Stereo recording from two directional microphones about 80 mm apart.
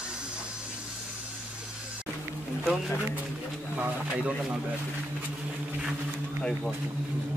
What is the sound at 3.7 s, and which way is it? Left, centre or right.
Speech, centre.